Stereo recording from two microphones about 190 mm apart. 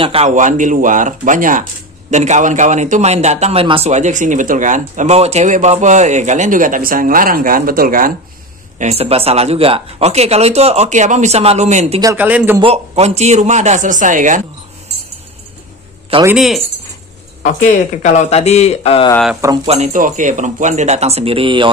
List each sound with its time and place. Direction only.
0.0 s a man's voice: 30° right (ahead or behind); by 8.1 s 50° right (ahead or behind)
8.7 s a man's voice: 35° right (ahead or behind)
12.0 s a man's voice: 10° right (ahead or behind)
12.5 s a man's voice: 30° right (ahead or behind)
16.3 s speech: centre (ahead or behind)
18.0 s a man's voice: 40° left (ahead or behind)
19.6 s a man's voice: 35° right (ahead or behind)